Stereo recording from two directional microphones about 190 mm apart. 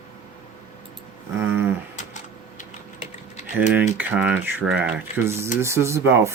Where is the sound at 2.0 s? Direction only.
40° left (ahead or behind).